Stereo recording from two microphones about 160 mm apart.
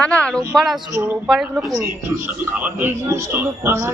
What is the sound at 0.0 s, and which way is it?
Speech, 10° left (ahead or behind).